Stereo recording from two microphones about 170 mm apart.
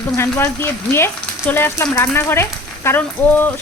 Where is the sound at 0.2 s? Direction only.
15° left (ahead or behind).